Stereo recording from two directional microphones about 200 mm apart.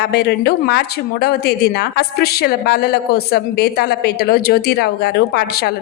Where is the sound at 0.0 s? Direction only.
55° left (ahead or behind).